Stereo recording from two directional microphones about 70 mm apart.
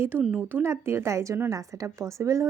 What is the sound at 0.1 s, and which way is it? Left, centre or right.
Speech, right.